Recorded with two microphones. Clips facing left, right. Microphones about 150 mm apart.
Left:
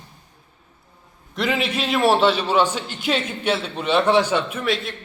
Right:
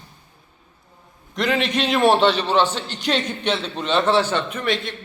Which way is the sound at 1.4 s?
5° left (ahead or behind).